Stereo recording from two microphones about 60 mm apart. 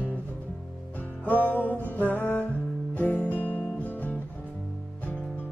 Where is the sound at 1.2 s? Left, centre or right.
Left.